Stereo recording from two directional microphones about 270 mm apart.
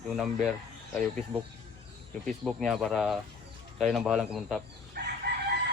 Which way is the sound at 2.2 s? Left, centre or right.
Centre.